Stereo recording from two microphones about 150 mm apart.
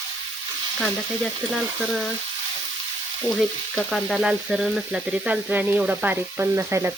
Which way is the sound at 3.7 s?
Centre (ahead or behind).